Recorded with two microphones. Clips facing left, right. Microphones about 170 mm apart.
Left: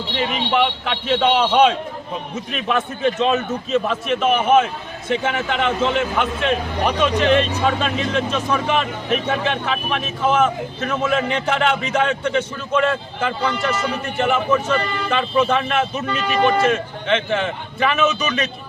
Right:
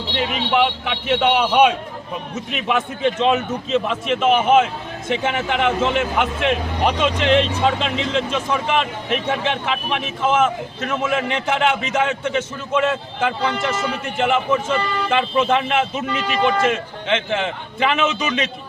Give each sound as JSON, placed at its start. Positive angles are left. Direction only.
{"t": 0.5, "sound": "a man's voice", "side_deg": -10}